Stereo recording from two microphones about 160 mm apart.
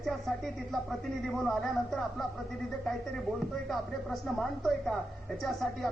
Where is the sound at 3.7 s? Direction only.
Centre (ahead or behind).